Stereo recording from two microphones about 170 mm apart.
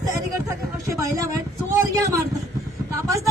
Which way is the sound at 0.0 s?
20° right (ahead or behind).